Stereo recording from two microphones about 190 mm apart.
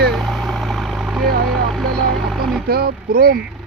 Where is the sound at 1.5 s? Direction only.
Centre (ahead or behind).